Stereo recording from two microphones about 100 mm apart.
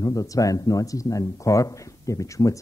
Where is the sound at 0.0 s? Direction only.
35° left (ahead or behind).